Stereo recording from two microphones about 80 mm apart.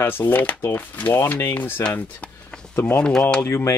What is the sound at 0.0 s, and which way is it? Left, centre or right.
Speech, left.